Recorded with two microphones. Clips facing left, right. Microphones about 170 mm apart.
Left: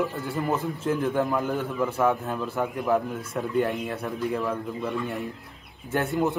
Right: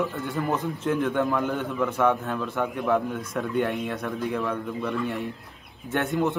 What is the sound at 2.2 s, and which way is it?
Speech, 20° left (ahead or behind).